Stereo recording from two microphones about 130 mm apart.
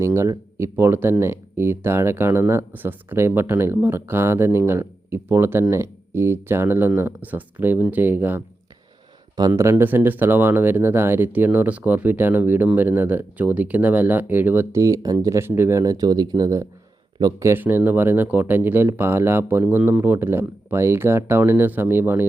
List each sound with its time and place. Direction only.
0.0 s speech: 20° right (ahead or behind)
9.5 s speech: 20° right (ahead or behind)
17.5 s speech: 15° right (ahead or behind)